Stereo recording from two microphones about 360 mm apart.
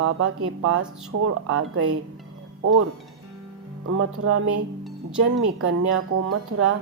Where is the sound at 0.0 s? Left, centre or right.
Right.